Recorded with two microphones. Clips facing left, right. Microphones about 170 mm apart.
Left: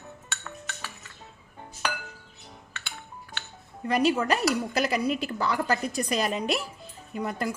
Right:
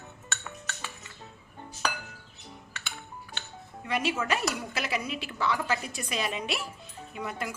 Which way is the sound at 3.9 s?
40° left (ahead or behind).